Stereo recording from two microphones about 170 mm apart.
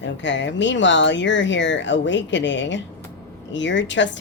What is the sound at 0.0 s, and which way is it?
A woman's voice, 90° left.